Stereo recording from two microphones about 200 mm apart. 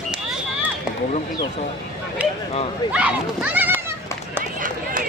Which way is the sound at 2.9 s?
5° right (ahead or behind).